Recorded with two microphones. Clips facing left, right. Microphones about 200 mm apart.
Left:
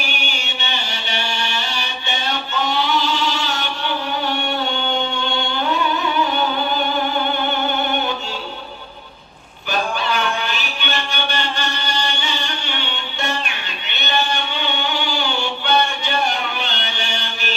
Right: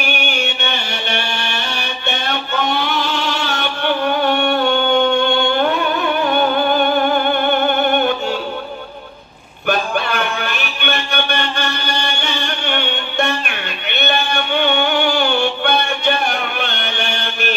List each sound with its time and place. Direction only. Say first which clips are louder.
0.0 s music: right 7 dB; 55° right (ahead or behind)
9.7 s music: right 3 dB; 55° right (ahead or behind)